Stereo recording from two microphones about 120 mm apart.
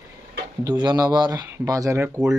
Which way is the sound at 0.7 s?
35° right (ahead or behind).